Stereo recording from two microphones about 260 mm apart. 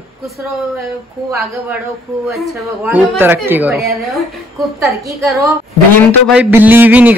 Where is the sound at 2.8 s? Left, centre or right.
Centre.